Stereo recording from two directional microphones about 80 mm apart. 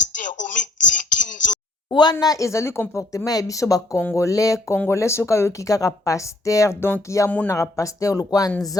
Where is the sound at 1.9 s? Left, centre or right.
Left.